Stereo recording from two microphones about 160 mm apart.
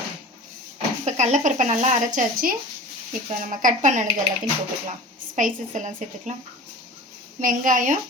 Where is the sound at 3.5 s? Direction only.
50° right (ahead or behind).